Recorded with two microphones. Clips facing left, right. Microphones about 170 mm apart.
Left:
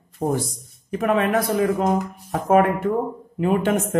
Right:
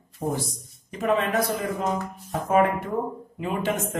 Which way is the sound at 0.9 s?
60° left (ahead or behind).